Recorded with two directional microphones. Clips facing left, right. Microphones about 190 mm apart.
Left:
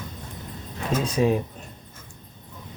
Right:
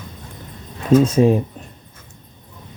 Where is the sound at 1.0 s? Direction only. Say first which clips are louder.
Right 3 dB; 45° right (ahead or behind).